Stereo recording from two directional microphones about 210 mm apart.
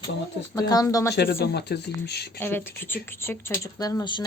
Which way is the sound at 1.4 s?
50° left (ahead or behind).